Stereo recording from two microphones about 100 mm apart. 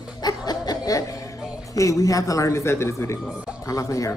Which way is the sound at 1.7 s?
35° left (ahead or behind).